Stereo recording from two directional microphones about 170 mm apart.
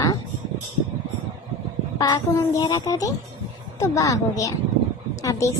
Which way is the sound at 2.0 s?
25° left (ahead or behind).